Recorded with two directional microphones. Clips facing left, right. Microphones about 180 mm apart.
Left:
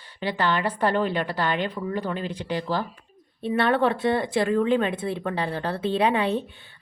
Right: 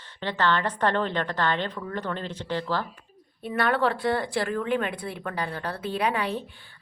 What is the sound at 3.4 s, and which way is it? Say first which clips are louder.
Speech: left 3 dB; 25° left (ahead or behind).